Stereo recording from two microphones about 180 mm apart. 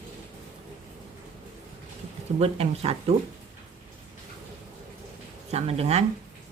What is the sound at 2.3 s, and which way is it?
Speech, 35° right (ahead or behind).